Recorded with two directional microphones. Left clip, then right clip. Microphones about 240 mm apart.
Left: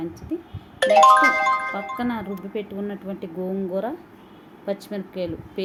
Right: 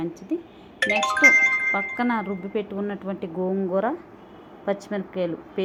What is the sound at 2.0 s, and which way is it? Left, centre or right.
Speech, centre.